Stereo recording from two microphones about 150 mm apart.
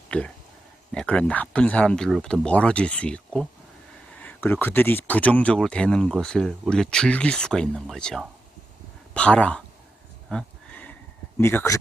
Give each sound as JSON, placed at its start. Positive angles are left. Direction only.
{"t": 0.1, "sound": "speech", "side_deg": 10}
{"t": 10.2, "sound": "horse", "side_deg": 5}
{"t": 11.3, "sound": "speech", "side_deg": 15}